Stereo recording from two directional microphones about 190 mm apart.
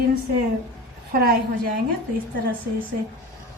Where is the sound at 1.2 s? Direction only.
50° right (ahead or behind).